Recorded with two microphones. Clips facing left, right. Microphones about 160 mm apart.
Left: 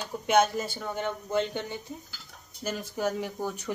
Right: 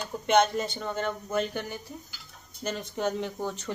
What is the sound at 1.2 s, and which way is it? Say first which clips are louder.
Speech: left 1 dB; 25° left (ahead or behind).